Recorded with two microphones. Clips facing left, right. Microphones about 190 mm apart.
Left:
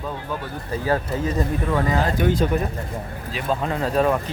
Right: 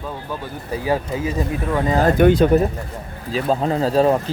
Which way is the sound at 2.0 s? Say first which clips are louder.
Right 11 dB; 50° right (ahead or behind).